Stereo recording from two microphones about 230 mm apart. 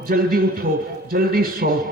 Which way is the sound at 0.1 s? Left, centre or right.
Right.